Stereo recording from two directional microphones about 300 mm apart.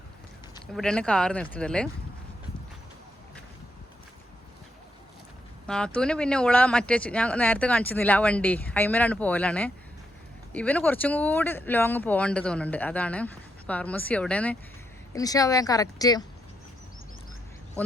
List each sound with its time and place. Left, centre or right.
0.7 s speech: centre
5.6 s speech: centre